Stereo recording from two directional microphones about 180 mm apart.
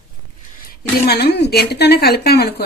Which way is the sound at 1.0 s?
60° left (ahead or behind).